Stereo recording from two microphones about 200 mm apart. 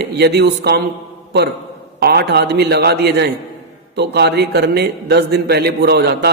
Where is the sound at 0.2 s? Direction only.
55° right (ahead or behind).